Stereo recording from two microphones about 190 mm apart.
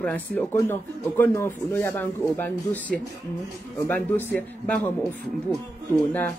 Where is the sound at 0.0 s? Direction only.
5° left (ahead or behind).